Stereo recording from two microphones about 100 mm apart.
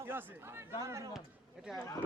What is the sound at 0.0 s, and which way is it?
Speech, 20° right (ahead or behind).